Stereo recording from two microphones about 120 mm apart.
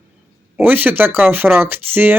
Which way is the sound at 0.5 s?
15° right (ahead or behind).